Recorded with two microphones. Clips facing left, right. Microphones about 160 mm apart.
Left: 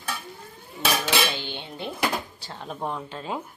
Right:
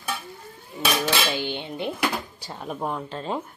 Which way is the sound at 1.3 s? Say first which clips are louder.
Right 6 dB; 15° right (ahead or behind).